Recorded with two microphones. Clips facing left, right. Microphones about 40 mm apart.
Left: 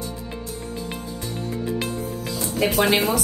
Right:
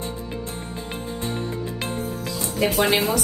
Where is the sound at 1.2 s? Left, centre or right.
Right.